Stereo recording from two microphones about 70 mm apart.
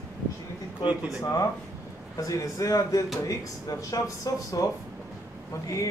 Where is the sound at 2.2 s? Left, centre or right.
Left.